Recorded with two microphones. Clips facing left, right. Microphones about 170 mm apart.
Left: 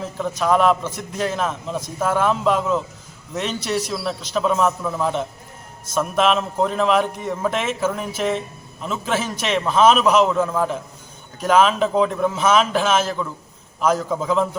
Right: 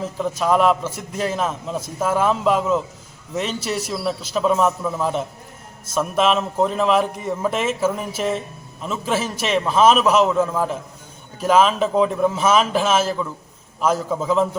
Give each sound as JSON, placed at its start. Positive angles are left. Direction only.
{"t": 0.2, "sound": "a man's voice", "side_deg": -5}